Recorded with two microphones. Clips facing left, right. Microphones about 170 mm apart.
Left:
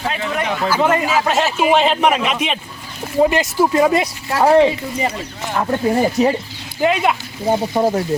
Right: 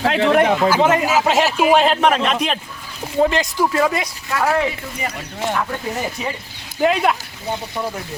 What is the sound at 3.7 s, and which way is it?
Speech, 25° left (ahead or behind).